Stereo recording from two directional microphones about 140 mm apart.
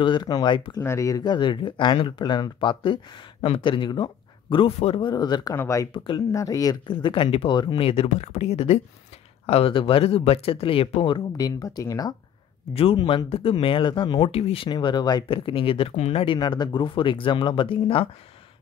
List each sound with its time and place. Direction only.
0.0 s speech: 35° left (ahead or behind)
0.8 s speech: 25° left (ahead or behind); by 5.1 s 45° left (ahead or behind)
5.1 s speech: 30° left (ahead or behind)
12.7 s speech: 40° left (ahead or behind)